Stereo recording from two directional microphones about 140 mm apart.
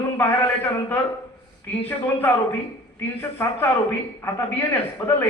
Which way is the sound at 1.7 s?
15° left (ahead or behind).